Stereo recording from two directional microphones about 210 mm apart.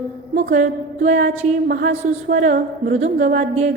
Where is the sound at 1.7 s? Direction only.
50° right (ahead or behind).